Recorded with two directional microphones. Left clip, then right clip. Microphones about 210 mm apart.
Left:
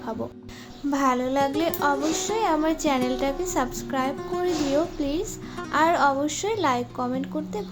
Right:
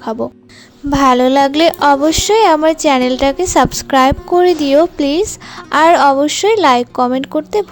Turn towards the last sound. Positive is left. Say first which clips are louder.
# right 15 dB
turn(degrees=-45)  # may be behind; listen again after turning